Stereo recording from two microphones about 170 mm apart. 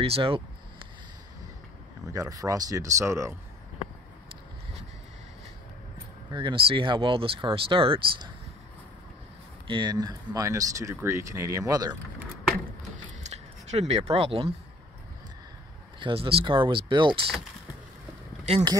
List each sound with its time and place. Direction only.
0.0 s speech: 35° right (ahead or behind)
2.0 s speech: 20° right (ahead or behind)
6.3 s speech: 30° right (ahead or behind)
9.7 s speech: 25° right (ahead or behind)
13.2 s a sound: 40° right (ahead or behind)
16.0 s speech: 30° right (ahead or behind)